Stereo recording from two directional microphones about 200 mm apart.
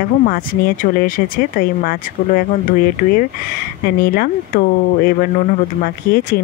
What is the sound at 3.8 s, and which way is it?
Speech, 50° left (ahead or behind).